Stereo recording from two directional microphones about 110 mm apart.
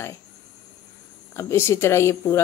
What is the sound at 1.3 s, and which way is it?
Speech, 25° left (ahead or behind).